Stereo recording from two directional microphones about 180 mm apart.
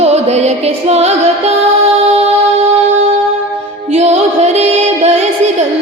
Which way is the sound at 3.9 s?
35° right (ahead or behind).